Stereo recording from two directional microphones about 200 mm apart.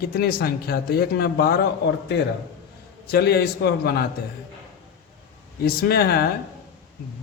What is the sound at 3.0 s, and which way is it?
Speech, 55° left (ahead or behind).